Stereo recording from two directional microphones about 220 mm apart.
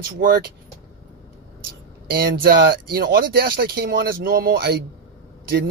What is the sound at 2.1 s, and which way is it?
Speech, 45° right (ahead or behind).